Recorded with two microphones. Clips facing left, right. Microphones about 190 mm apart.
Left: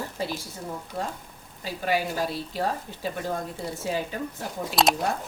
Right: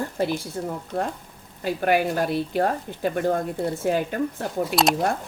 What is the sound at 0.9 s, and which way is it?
Speech, 60° right (ahead or behind).